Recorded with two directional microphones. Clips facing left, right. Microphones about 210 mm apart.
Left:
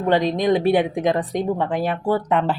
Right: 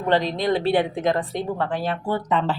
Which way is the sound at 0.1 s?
15° left (ahead or behind).